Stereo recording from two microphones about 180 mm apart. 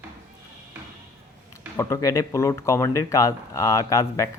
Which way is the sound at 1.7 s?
15° left (ahead or behind).